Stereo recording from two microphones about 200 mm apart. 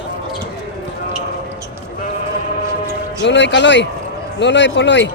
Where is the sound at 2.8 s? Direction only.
65° left (ahead or behind).